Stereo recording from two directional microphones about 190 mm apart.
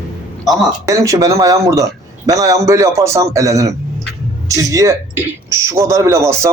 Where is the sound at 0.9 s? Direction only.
15° right (ahead or behind).